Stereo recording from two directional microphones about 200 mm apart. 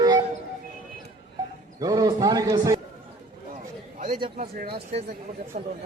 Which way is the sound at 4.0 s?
45° right (ahead or behind).